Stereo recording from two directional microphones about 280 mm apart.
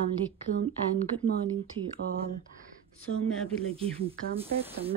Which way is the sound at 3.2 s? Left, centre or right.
Centre.